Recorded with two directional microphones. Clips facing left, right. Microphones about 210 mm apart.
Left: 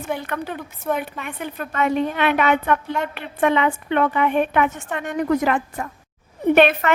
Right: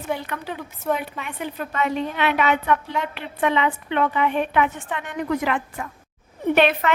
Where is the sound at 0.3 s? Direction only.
50° left (ahead or behind).